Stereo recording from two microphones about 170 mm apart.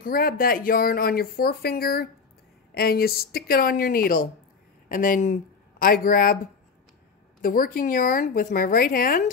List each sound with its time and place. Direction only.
0.0 s speech: 55° left (ahead or behind)
7.4 s speech: 55° left (ahead or behind)